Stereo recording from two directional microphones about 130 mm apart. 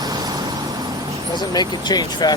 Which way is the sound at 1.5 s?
30° left (ahead or behind).